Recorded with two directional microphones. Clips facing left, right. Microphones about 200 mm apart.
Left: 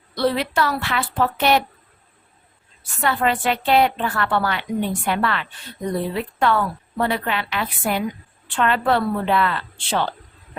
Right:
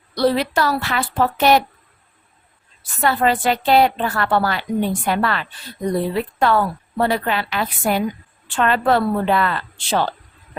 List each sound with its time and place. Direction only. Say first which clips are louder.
0.1 s a woman's voice: right 3 dB; 40° right (ahead or behind)
3.0 s a woman's voice: right 3 dB; 40° right (ahead or behind)